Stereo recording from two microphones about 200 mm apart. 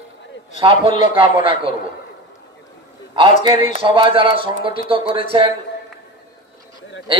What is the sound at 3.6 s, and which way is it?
A man's voice, 25° right (ahead or behind).